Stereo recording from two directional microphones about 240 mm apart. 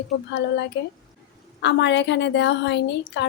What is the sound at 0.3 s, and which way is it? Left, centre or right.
A woman's voice, left.